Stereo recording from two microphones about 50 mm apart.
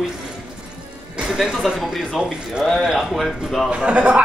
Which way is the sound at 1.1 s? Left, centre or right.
Centre.